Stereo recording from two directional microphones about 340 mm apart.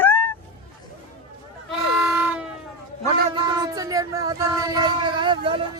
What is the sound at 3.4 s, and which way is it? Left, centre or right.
Speech, centre.